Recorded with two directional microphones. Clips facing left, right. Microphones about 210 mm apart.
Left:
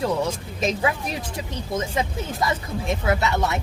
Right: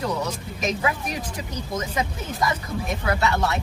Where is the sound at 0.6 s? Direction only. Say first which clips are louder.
Left 2 dB; 25° left (ahead or behind).